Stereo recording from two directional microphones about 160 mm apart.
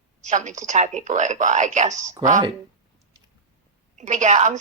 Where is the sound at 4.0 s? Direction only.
50° right (ahead or behind).